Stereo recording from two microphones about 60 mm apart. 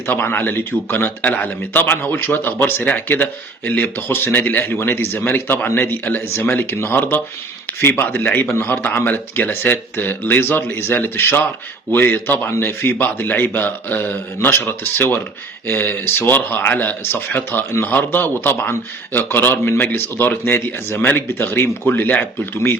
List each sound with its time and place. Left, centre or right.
0.1 s speech: left
3.7 s speech: left
8.4 s speech: left
12.5 s speech: left
17.7 s speech: left
17.9 s speech: left